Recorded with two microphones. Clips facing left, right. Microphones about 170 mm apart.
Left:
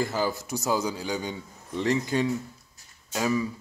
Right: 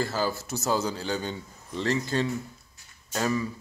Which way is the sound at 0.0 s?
15° left (ahead or behind).